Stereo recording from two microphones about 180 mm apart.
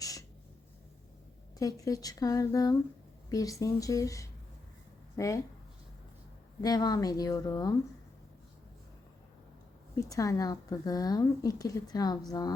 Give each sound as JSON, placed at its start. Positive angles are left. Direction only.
{"t": 0.0, "sound": "a sound", "side_deg": 20}
{"t": 1.5, "sound": "speech", "side_deg": 20}
{"t": 6.6, "sound": "speech", "side_deg": 20}
{"t": 9.9, "sound": "speech", "side_deg": 20}